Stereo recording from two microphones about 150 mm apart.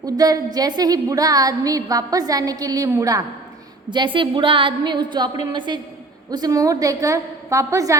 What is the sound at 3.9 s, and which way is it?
A woman's voice, 30° right (ahead or behind).